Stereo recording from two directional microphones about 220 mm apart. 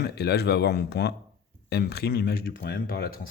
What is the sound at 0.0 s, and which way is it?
Speech, 50° left (ahead or behind).